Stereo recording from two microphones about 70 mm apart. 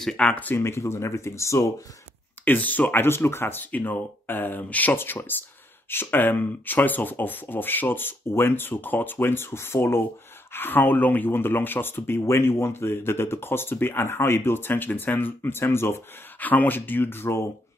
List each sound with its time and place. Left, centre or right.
0.0 s speech: centre
0.6 s speech: left
2.4 s speech: left
16.3 s speech: left